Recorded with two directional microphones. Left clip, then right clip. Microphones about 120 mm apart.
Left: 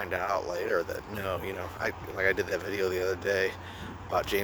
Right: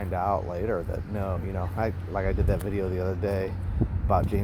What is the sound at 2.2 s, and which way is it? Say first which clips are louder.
Speech: left 5 dB; 45° left (ahead or behind).